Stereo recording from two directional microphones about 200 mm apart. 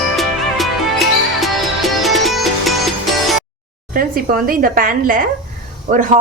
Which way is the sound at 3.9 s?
45° right (ahead or behind).